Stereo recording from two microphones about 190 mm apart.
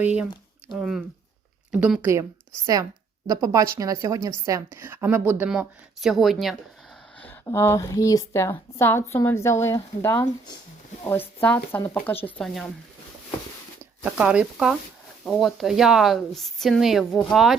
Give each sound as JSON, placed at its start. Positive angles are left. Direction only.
{"t": 0.7, "sound": "a woman's voice", "side_deg": 0}
{"t": 3.2, "sound": "a woman's voice", "side_deg": -15}
{"t": 7.4, "sound": "speech", "side_deg": 15}
{"t": 14.0, "sound": "speech", "side_deg": -5}